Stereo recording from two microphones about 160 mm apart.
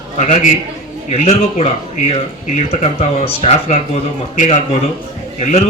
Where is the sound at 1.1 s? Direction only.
45° left (ahead or behind).